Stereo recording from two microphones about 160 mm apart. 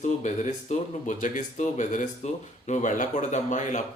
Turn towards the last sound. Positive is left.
turn(degrees=50)  # may be behind; listen again after turning